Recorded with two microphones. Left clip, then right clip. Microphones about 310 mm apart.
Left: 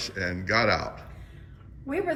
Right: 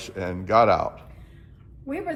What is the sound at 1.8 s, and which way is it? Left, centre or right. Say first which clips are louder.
Speech: left 2 dB; left.